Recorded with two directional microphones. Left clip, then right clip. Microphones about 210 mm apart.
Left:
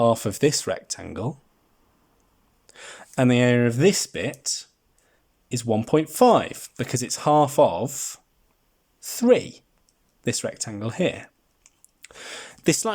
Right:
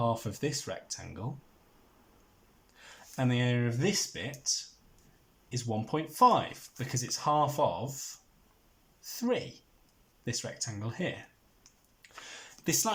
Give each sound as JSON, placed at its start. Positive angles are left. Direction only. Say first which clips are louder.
{"t": 0.0, "sound": "speech", "louder": "left 12 dB", "side_deg": 50}
{"t": 2.7, "sound": "speech", "louder": "left 13 dB", "side_deg": 50}
{"t": 12.0, "sound": "a sound", "louder": "left 9 dB", "side_deg": 50}